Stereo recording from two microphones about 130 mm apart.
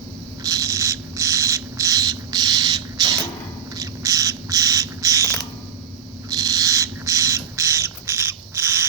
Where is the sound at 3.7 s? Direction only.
25° right (ahead or behind).